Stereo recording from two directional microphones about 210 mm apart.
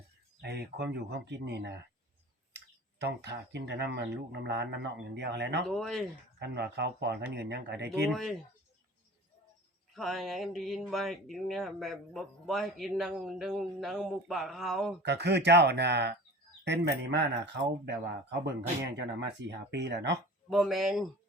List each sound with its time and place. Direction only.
0.4 s speech: 50° right (ahead or behind)
3.0 s speech: 55° right (ahead or behind)
5.6 s speech: centre (ahead or behind)
6.4 s speech: 55° right (ahead or behind)
8.1 s speech: centre (ahead or behind)
9.9 s speech: centre (ahead or behind)
15.0 s speech: 55° right (ahead or behind)
19.4 s speech: 55° right (ahead or behind)
20.5 s speech: centre (ahead or behind)